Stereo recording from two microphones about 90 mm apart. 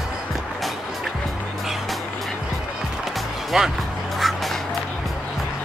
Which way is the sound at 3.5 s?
5° right (ahead or behind).